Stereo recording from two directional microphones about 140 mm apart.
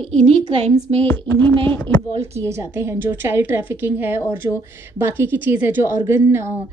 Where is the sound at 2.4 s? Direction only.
20° right (ahead or behind).